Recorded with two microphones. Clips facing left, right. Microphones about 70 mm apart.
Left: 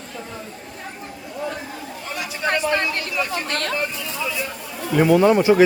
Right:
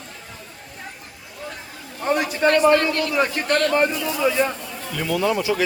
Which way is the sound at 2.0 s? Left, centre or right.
Right.